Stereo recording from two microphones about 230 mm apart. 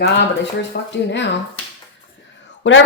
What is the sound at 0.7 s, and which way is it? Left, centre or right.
Speech, left.